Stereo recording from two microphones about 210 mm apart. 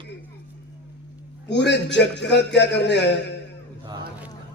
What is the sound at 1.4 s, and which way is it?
A man's voice, 55° left (ahead or behind).